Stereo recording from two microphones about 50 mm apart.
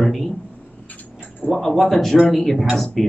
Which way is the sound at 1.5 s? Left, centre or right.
Centre.